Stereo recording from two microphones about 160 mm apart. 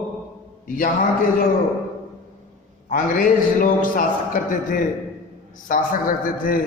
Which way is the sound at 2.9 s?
60° left (ahead or behind).